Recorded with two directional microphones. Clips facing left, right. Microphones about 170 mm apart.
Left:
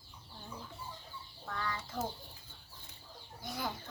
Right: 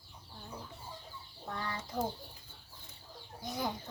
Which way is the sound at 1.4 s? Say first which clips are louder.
Even; 20° right (ahead or behind).